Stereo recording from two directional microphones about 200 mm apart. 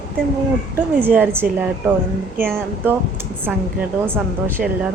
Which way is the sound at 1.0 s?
10° right (ahead or behind).